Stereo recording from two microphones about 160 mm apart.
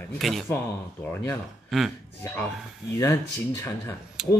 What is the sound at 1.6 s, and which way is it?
Speech, centre (ahead or behind).